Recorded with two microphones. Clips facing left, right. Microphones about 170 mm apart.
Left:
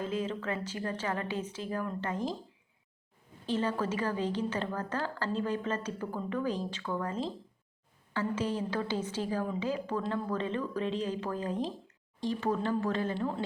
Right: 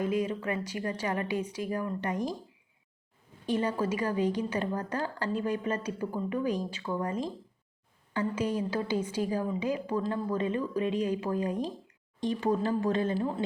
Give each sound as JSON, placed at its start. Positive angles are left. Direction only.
{"t": 0.0, "sound": "a woman's voice", "side_deg": -15}
{"t": 3.4, "sound": "a woman's voice", "side_deg": -15}